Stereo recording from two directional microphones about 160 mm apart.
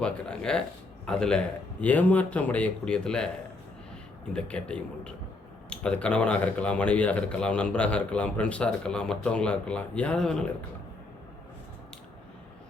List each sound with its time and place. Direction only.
0.0 s speech: 5° left (ahead or behind)
4.3 s speech: 5° left (ahead or behind)